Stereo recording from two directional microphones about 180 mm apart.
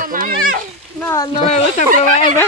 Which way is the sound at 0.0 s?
50° right (ahead or behind).